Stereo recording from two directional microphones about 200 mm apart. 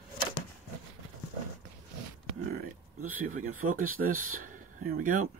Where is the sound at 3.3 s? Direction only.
40° right (ahead or behind).